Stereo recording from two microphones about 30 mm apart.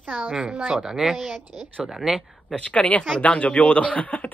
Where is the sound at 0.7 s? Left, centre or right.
Right.